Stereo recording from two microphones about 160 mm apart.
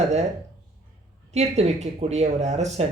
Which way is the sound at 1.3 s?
45° right (ahead or behind).